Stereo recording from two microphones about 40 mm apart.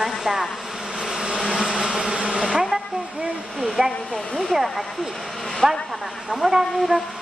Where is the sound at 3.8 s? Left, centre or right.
Centre.